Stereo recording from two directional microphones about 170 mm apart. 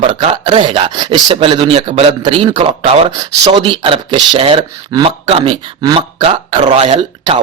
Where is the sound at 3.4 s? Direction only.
25° right (ahead or behind).